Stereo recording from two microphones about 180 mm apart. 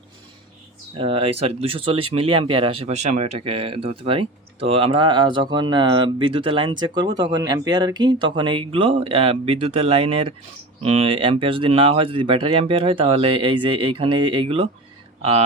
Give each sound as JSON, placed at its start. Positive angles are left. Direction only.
{"t": 0.9, "sound": "speech", "side_deg": -30}